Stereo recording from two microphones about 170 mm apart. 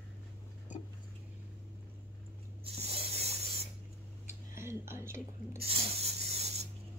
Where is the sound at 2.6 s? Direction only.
35° right (ahead or behind).